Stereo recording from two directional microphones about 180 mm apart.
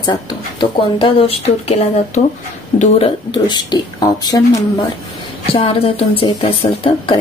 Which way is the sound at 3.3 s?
25° left (ahead or behind).